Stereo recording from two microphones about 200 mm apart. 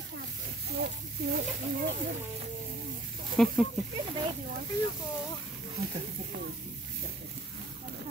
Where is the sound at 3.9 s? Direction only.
25° right (ahead or behind).